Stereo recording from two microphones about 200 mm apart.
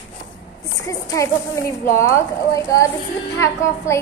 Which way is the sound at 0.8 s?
15° left (ahead or behind).